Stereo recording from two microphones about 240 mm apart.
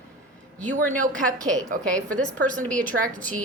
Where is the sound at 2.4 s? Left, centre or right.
Right.